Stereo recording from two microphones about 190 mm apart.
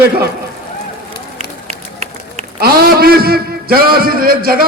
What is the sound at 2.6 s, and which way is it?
A man's voice, 55° right (ahead or behind).